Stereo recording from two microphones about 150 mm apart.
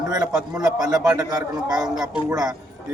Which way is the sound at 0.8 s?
25° right (ahead or behind).